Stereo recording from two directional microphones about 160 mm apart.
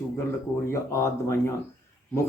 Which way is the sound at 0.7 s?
15° left (ahead or behind).